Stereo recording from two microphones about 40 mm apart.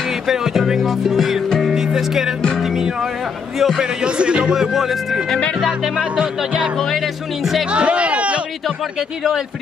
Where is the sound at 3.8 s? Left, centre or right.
Right.